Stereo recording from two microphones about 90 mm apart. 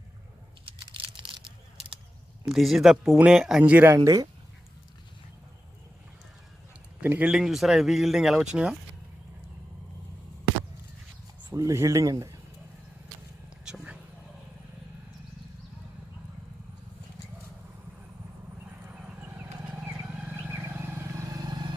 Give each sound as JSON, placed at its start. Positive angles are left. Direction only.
{"t": 0.9, "sound": "a sound", "side_deg": -75}
{"t": 2.5, "sound": "speech", "side_deg": 0}
{"t": 3.6, "sound": "speech", "side_deg": -20}
{"t": 3.9, "sound": "speech", "side_deg": -40}
{"t": 7.0, "sound": "a man's voice", "side_deg": -20}
{"t": 7.3, "sound": "speech", "side_deg": -5}
{"t": 11.5, "sound": "speech", "side_deg": -35}
{"t": 13.7, "sound": "a sound", "side_deg": -10}
{"t": 18.9, "sound": "wild animals", "side_deg": -20}
{"t": 20.1, "sound": "vehicle", "side_deg": -15}
{"t": 20.5, "sound": "vehicle", "side_deg": -25}